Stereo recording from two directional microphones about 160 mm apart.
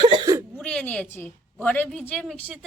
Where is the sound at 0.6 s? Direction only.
10° left (ahead or behind).